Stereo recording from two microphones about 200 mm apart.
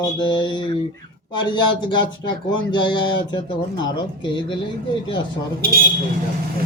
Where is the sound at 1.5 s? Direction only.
20° left (ahead or behind).